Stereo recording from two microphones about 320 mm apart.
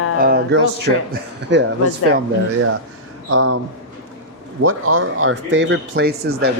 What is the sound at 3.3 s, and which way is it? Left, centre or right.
Speech, right.